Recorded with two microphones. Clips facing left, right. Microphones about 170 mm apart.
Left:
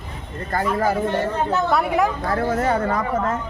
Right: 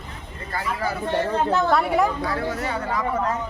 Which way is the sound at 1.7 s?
Centre (ahead or behind).